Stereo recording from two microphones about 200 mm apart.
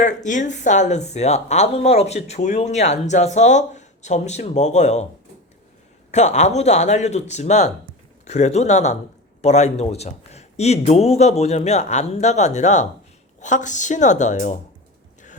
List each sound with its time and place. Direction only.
0.0 s speech: 40° left (ahead or behind)
6.1 s speech: 35° left (ahead or behind)